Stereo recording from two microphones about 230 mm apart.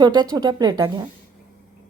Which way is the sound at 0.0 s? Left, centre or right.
Centre.